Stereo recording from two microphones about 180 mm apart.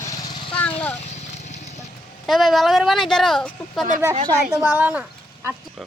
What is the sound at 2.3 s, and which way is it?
Speech, centre (ahead or behind).